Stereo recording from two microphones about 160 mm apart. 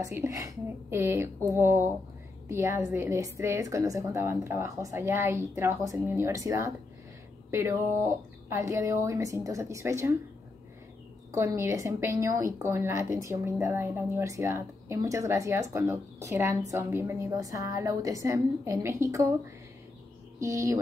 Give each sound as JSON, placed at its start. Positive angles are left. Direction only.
{"t": 0.0, "sound": "a woman's voice", "side_deg": -15}
{"t": 11.3, "sound": "a woman's voice", "side_deg": -20}
{"t": 20.3, "sound": "a woman's voice", "side_deg": -20}